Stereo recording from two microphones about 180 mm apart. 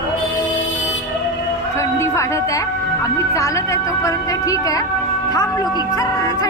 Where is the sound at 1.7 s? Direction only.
15° left (ahead or behind).